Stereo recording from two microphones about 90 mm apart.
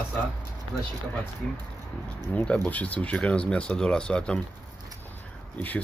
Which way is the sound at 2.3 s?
10° left (ahead or behind).